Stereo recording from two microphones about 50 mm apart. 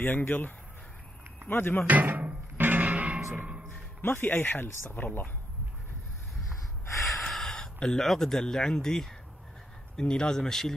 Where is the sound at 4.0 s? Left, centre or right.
Left.